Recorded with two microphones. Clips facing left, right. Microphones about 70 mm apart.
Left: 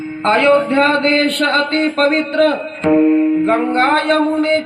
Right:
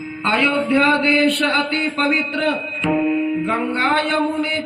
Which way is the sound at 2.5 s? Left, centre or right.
Left.